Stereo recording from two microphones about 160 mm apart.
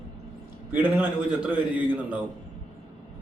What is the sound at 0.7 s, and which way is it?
Speech, 10° right (ahead or behind).